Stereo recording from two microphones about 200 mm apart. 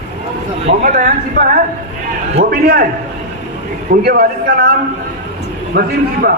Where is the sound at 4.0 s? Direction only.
50° right (ahead or behind).